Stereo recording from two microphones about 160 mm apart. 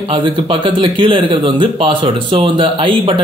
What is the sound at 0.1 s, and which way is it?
Speech, 30° right (ahead or behind).